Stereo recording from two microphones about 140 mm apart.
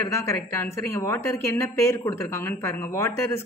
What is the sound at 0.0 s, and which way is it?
A woman's voice, 20° left (ahead or behind).